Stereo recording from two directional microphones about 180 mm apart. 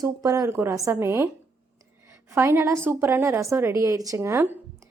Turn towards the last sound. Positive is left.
turn(degrees=-10)  # may be behind; listen again after turning